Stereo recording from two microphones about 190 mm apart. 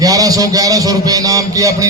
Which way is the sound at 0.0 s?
20° right (ahead or behind).